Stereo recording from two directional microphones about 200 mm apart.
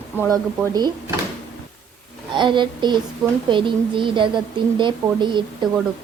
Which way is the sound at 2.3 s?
25° right (ahead or behind).